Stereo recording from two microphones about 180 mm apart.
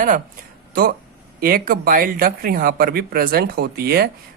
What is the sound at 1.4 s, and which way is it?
Speech, 55° right (ahead or behind).